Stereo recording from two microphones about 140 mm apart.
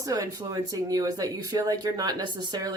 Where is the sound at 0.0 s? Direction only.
25° right (ahead or behind).